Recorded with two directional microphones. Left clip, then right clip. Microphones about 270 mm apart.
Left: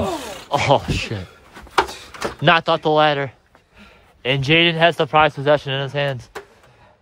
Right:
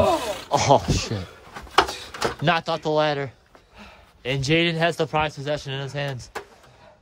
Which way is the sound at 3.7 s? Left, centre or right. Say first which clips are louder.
Right 1 dB; centre.